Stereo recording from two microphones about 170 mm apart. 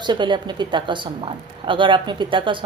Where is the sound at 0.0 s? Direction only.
25° right (ahead or behind).